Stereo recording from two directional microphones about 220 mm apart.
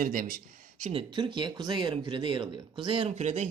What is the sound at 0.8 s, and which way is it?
Speech, 25° right (ahead or behind).